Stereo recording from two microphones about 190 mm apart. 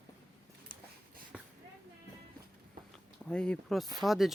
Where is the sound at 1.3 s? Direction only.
5° right (ahead or behind).